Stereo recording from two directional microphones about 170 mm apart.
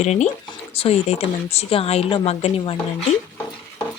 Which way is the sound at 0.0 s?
40° left (ahead or behind).